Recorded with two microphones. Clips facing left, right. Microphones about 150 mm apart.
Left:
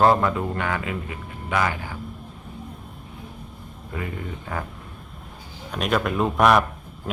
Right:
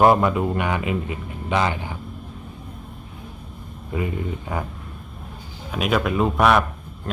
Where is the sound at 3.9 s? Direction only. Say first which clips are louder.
Right 5 dB; 15° right (ahead or behind).